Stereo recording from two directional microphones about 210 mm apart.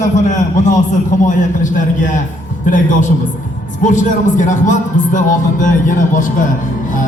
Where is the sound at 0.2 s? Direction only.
35° left (ahead or behind).